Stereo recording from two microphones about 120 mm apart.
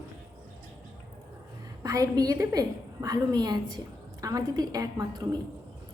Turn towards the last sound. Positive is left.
turn(degrees=-30)  # may be behind; listen again after turning